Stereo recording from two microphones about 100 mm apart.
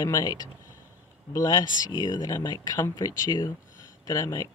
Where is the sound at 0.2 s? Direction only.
40° left (ahead or behind).